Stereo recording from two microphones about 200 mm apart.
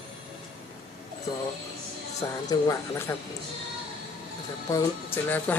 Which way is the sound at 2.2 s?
15° left (ahead or behind).